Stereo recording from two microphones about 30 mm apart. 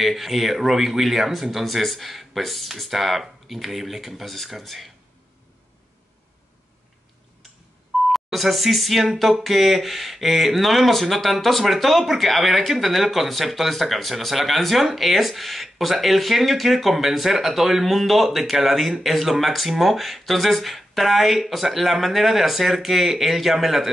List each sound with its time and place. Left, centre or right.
0.0 s speech: centre
8.1 s speech: centre